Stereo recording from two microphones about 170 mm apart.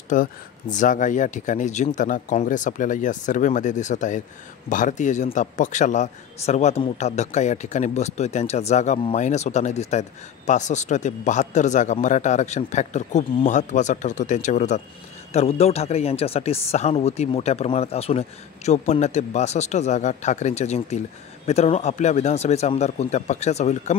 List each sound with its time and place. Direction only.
0.1 s speech: 50° left (ahead or behind)